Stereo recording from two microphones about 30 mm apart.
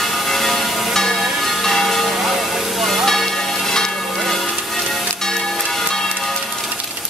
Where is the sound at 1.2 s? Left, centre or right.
Centre.